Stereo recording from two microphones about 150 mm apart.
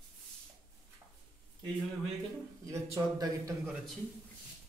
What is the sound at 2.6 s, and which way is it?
Speech, 20° right (ahead or behind).